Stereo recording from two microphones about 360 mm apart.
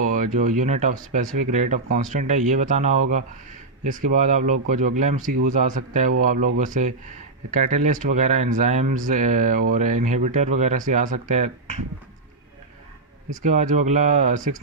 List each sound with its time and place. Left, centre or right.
0.1 s speech: right
13.3 s speech: right